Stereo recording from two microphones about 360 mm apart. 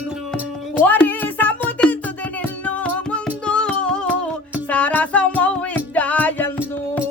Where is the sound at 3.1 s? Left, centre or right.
Centre.